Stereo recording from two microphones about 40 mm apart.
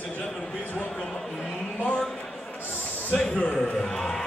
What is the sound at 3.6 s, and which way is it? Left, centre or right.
Speech, centre.